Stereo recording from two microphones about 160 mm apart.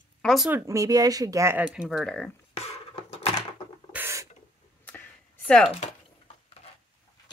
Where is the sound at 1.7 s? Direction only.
Centre (ahead or behind).